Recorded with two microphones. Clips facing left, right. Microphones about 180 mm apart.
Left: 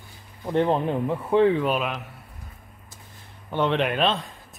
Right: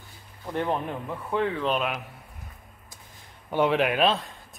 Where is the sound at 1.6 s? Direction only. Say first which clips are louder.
Left 2 dB; 5° left (ahead or behind).